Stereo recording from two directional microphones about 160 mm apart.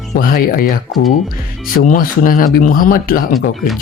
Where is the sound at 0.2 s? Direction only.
60° left (ahead or behind).